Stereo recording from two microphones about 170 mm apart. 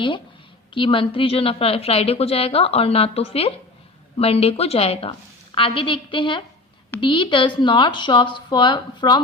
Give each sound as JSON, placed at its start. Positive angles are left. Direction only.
{"t": 0.7, "sound": "a woman's voice", "side_deg": 30}